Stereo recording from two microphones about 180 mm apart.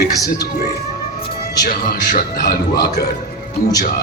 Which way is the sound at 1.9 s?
50° left (ahead or behind).